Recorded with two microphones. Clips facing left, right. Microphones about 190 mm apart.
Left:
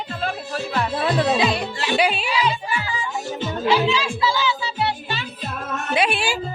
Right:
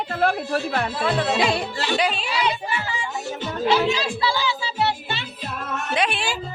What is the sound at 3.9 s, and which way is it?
Music, 40° right (ahead or behind).